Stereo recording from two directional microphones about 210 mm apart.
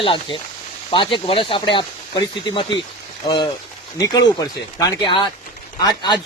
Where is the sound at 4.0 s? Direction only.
15° left (ahead or behind).